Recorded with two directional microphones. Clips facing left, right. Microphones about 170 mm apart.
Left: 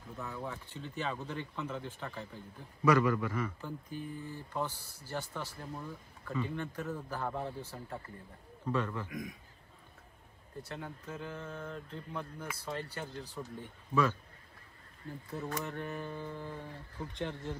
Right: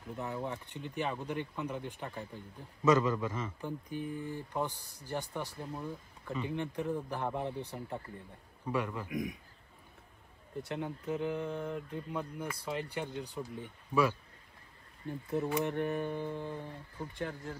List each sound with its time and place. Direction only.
0.1 s speech: 20° right (ahead or behind)
8.6 s speech: 15° right (ahead or behind)
10.7 s speech: 20° right (ahead or behind)
15.2 s speech: 20° right (ahead or behind)
17.2 s speech: 5° right (ahead or behind)